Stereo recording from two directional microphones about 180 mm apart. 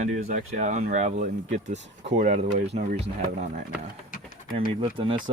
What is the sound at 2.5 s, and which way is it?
Speech, 60° right (ahead or behind).